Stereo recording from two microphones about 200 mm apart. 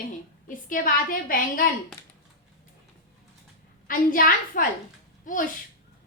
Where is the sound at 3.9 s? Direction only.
45° left (ahead or behind).